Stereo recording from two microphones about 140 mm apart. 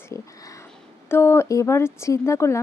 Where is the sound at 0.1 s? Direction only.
25° left (ahead or behind).